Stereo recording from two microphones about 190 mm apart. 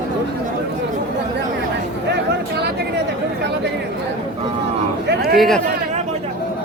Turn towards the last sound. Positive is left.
turn(degrees=0)  # may be behind; listen again after turning